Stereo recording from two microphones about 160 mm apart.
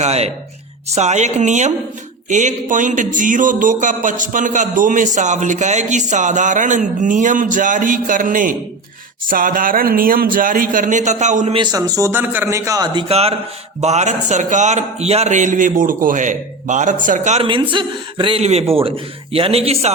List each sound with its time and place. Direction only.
0.0 s speech: 40° right (ahead or behind)
11.5 s a man's voice: 25° right (ahead or behind); by 17.4 s 45° right (ahead or behind)
17.4 s speech: 30° right (ahead or behind)